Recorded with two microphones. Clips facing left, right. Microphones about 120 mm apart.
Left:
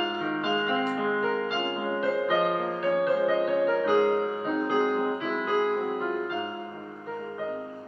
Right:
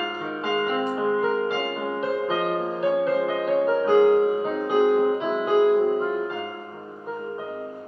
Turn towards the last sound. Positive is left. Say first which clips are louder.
# right 6 dB
turn(degrees=-20)  # may be behind; listen again after turning